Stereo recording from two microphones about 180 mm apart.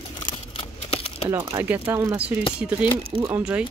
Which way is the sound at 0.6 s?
30° left (ahead or behind).